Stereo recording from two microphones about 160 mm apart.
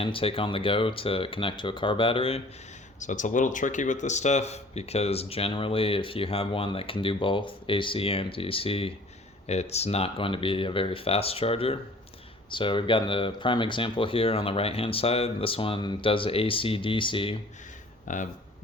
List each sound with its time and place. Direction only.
0.0 s speech: 35° left (ahead or behind)
3.0 s speech: 50° left (ahead or behind); by 17.3 s 30° left (ahead or behind)
18.1 s speech: 50° left (ahead or behind)